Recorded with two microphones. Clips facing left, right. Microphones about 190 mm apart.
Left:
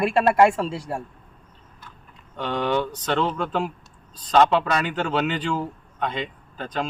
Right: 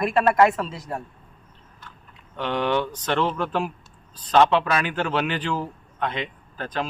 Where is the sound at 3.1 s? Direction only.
5° right (ahead or behind).